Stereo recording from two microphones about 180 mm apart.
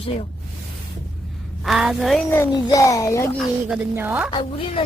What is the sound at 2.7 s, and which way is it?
Speech, 20° left (ahead or behind).